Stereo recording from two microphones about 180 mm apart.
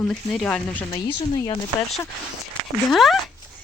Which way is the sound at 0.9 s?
25° left (ahead or behind).